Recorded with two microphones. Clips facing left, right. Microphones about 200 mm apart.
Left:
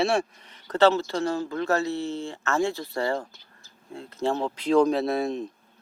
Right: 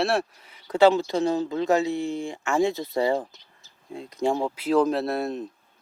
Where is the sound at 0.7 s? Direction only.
10° right (ahead or behind).